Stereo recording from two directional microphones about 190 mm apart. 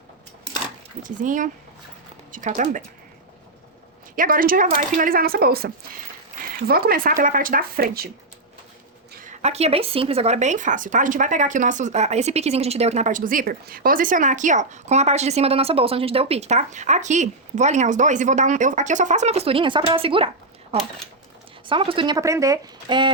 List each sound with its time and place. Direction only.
1.0 s a woman's voice: 45° right (ahead or behind)
4.1 s a woman's voice: 45° right (ahead or behind)
9.4 s speech: 35° right (ahead or behind)